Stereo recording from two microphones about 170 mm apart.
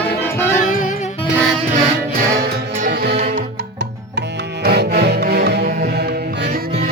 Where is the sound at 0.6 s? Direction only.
50° left (ahead or behind).